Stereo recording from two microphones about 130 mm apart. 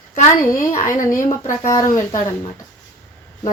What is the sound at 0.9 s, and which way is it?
Speech, 25° left (ahead or behind).